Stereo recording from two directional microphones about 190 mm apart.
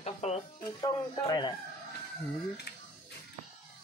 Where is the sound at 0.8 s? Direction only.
20° left (ahead or behind).